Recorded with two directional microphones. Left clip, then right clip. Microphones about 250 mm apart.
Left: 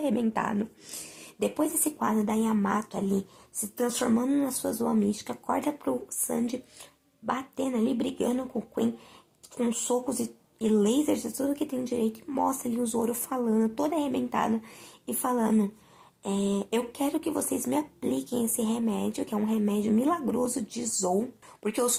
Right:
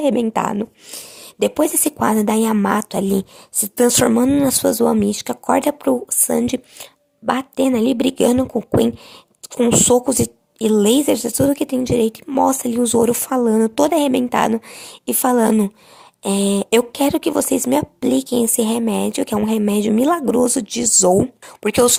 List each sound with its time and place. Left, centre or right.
0.0 s a woman's voice: right